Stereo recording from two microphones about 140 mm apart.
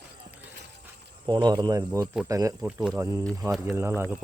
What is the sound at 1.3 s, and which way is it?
Speech, 30° right (ahead or behind).